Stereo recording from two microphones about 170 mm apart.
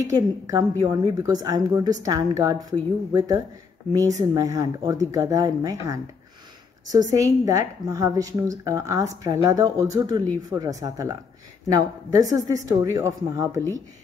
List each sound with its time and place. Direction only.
0.0 s a woman's voice: 20° right (ahead or behind)